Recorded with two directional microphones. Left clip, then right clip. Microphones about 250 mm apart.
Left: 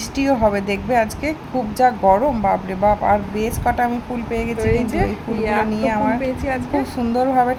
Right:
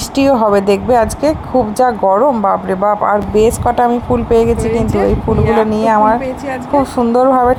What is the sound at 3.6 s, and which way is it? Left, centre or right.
Speech, right.